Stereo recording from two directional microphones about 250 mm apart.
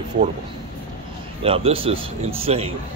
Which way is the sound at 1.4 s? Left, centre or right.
Right.